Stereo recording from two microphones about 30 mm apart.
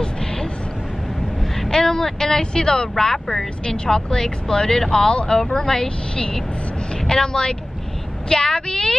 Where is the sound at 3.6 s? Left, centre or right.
Left.